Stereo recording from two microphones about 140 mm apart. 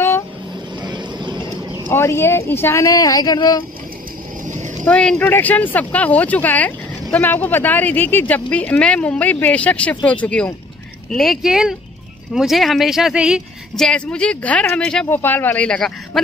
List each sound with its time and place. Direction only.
0.8 s vehicle: 35° right (ahead or behind)
1.9 s speech: 20° left (ahead or behind)
4.8 s speech: 5° left (ahead or behind)
13.8 s speech: 5° left (ahead or behind)